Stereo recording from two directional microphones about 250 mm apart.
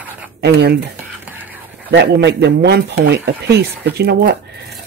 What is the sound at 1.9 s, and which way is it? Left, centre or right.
Speech, right.